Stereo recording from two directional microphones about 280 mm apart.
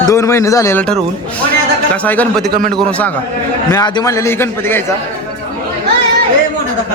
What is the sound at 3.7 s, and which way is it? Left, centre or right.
A man's voice, centre.